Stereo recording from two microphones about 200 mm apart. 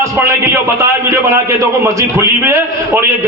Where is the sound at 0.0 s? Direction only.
15° right (ahead or behind).